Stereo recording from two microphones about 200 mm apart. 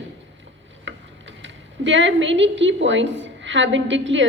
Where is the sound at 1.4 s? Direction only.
70° right (ahead or behind).